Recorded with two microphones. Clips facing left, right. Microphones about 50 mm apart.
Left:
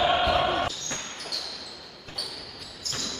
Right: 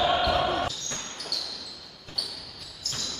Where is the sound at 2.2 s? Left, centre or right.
Left.